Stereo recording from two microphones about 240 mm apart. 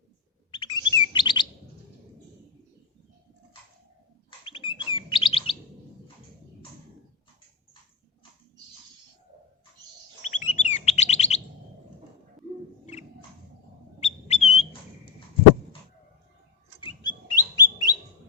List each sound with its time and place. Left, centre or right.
0.5 s chirp: centre
4.3 s chirp: left
10.2 s chirp: left
12.8 s a sound: left
14.0 s squawk: left
16.8 s a sound: centre